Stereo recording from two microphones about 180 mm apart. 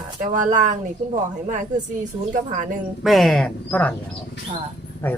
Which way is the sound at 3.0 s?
Centre (ahead or behind).